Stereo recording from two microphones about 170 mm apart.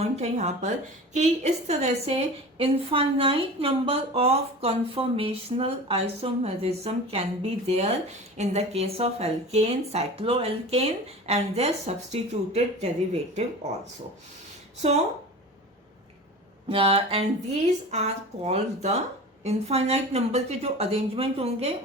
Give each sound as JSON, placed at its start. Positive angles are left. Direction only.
{"t": 0.0, "sound": "a woman's voice", "side_deg": -40}
{"t": 14.8, "sound": "a woman's voice", "side_deg": -40}
{"t": 16.6, "sound": "a woman's voice", "side_deg": -30}